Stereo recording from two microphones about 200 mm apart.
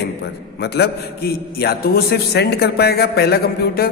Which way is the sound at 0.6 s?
55° left (ahead or behind).